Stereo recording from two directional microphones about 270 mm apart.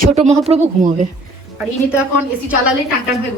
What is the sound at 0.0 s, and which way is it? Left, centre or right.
Speech, right.